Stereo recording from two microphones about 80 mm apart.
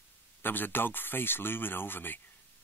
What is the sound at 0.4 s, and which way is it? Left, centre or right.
Speech, left.